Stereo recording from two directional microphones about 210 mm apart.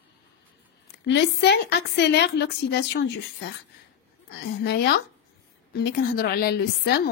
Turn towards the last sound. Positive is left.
turn(degrees=50)  # may be behind; listen again after turning